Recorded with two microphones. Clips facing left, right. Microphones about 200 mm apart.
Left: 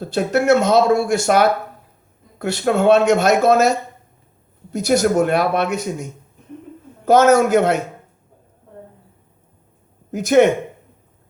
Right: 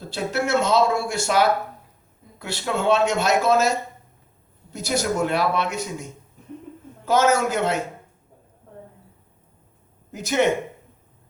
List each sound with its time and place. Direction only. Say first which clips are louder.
0.0 s a man's voice: left 7 dB; 55° left (ahead or behind)
10.1 s speech: left 8 dB; 50° left (ahead or behind)